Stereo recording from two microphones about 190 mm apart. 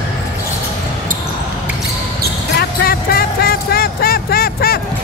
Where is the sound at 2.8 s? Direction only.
50° left (ahead or behind).